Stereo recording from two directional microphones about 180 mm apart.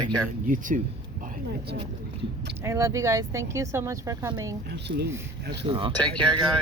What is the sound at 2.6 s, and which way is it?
Speech, 15° right (ahead or behind).